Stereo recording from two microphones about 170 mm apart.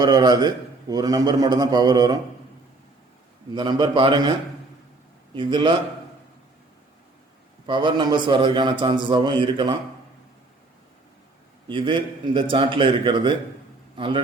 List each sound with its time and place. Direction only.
0.0 s a man's voice: 25° right (ahead or behind)
3.5 s a man's voice: 25° right (ahead or behind)
7.7 s a man's voice: 25° right (ahead or behind)
11.7 s a man's voice: 30° right (ahead or behind)